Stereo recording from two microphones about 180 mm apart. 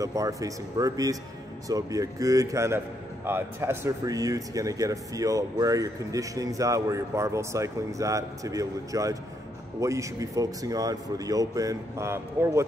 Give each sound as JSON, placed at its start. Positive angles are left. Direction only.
{"t": 0.0, "sound": "speech", "side_deg": -20}